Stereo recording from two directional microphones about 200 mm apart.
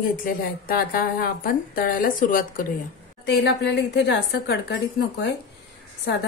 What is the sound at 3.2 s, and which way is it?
A woman's voice, 55° left (ahead or behind).